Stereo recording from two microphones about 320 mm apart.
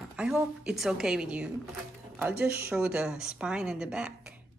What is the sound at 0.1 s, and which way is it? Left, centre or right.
Speech, centre.